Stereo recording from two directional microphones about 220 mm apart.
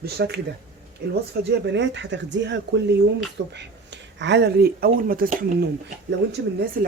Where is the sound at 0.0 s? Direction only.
50° right (ahead or behind).